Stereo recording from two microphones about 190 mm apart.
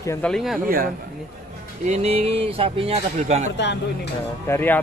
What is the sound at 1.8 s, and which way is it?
Speech, 35° right (ahead or behind).